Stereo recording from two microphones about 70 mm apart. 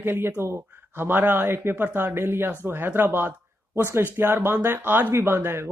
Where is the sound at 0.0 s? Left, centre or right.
Right.